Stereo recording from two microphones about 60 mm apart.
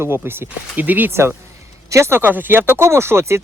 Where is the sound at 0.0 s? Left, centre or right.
Right.